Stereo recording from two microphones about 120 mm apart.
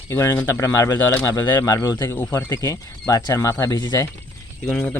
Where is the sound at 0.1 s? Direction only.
20° left (ahead or behind).